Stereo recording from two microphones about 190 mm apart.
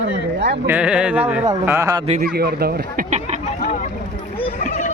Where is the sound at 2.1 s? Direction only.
45° right (ahead or behind).